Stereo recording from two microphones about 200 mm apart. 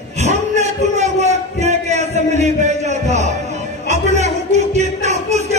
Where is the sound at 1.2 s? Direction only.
35° right (ahead or behind).